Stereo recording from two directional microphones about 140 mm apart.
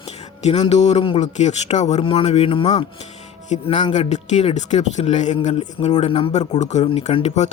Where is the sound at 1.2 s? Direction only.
55° left (ahead or behind).